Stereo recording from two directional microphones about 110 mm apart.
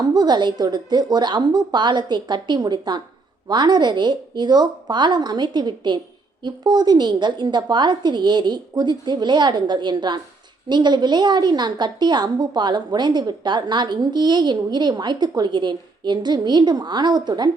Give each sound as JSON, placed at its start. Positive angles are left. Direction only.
{"t": 0.0, "sound": "a woman's voice", "side_deg": -40}